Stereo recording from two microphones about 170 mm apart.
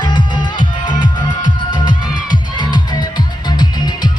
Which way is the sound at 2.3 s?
25° left (ahead or behind).